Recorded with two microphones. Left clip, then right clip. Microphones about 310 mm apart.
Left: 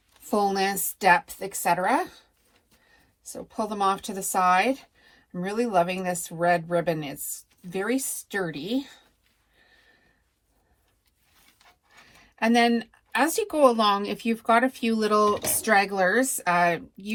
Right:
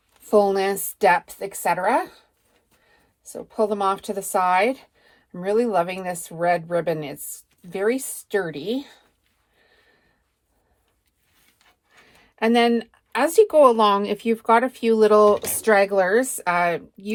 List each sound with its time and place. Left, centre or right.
0.3 s speech: right
3.2 s speech: right
12.2 s speech: right
15.4 s speech: centre
15.6 s speech: right